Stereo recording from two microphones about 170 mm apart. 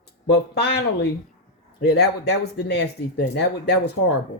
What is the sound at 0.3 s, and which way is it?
Speech, 75° left (ahead or behind).